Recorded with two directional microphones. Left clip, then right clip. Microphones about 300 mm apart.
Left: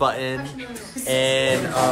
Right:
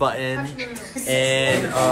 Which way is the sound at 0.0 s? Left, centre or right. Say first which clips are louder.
Even; centre.